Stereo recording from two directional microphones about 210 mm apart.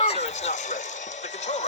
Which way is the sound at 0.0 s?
30° left (ahead or behind).